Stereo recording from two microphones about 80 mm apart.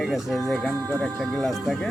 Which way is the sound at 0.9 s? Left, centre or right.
Centre.